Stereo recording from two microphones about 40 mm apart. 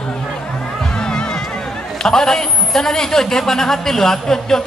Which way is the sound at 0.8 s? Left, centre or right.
Centre.